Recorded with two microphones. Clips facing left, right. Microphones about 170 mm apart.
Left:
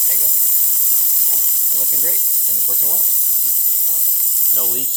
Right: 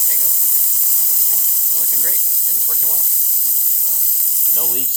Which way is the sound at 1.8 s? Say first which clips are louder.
Left 4 dB; 20° left (ahead or behind).